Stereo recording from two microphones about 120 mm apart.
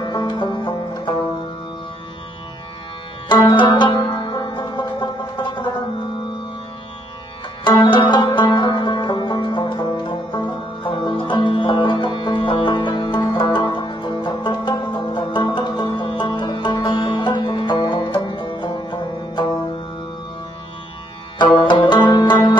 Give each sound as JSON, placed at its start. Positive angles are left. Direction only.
{"t": 0.1, "sound": "banjo", "side_deg": 40}
{"t": 3.3, "sound": "music", "side_deg": 40}
{"t": 7.6, "sound": "music", "side_deg": 40}
{"t": 21.5, "sound": "music", "side_deg": 40}